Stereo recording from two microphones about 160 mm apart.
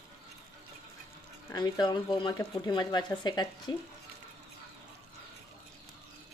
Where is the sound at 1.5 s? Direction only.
25° left (ahead or behind).